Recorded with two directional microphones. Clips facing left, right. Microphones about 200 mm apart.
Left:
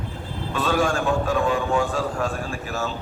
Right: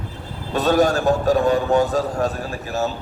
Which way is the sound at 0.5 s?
40° right (ahead or behind).